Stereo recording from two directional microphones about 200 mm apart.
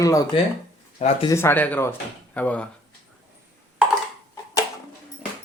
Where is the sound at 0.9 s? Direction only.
35° left (ahead or behind).